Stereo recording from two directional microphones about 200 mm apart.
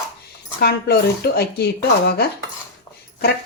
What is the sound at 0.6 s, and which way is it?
Speech, 55° left (ahead or behind).